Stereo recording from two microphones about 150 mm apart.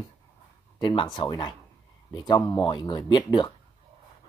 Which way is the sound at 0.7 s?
30° left (ahead or behind).